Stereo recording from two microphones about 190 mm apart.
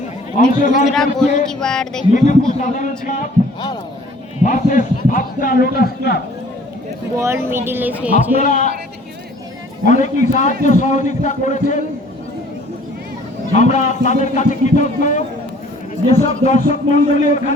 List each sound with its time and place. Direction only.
0.3 s a man's voice: 45° left (ahead or behind)
1.5 s speech: 5° left (ahead or behind)
2.1 s a man's voice: 40° left (ahead or behind)
4.4 s a man's voice: 40° left (ahead or behind)
7.2 s speech: 15° right (ahead or behind)
8.4 s a man's voice: 40° left (ahead or behind)
9.8 s a man's voice: 40° left (ahead or behind)
13.5 s a man's voice: 40° left (ahead or behind)